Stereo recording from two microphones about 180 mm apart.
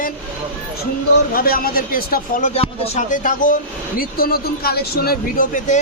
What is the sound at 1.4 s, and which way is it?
Speech, 55° left (ahead or behind).